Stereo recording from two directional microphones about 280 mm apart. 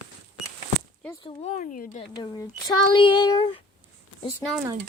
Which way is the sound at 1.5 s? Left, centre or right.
Left.